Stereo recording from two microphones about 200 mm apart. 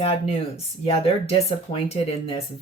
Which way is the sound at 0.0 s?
30° left (ahead or behind).